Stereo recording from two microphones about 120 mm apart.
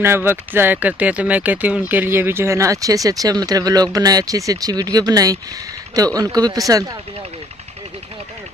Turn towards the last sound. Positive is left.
turn(degrees=-30)  # may be behind; listen again after turning